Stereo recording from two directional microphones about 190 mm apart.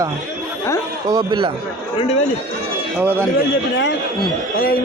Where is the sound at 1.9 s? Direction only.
30° left (ahead or behind).